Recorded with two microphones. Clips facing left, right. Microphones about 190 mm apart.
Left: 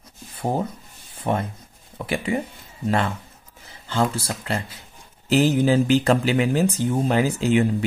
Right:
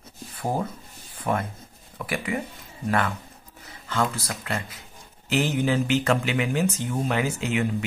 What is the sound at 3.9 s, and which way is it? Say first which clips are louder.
Speech: left 3 dB; 30° left (ahead or behind).